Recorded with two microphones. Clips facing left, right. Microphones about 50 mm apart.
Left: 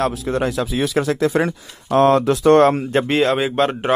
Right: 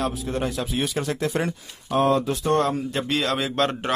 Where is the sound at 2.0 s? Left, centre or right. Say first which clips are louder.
Left 7 dB; left.